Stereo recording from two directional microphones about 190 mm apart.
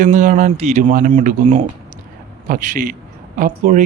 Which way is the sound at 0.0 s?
40° right (ahead or behind).